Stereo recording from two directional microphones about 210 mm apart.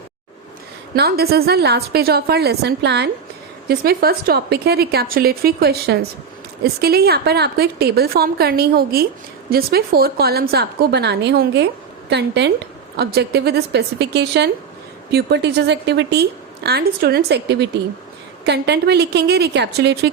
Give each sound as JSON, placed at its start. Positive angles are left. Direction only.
{"t": 0.9, "sound": "a woman's voice", "side_deg": -50}